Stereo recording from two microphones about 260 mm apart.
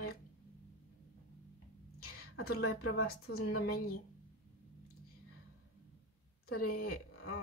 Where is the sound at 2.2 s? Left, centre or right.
Left.